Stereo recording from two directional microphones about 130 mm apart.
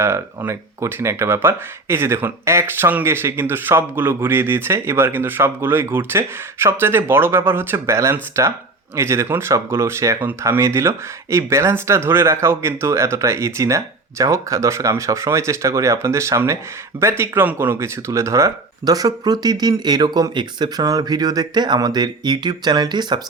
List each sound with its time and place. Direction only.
0.0 s speech: 20° right (ahead or behind)